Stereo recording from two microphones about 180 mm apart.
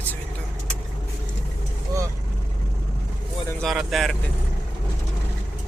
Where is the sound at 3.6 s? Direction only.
Centre (ahead or behind).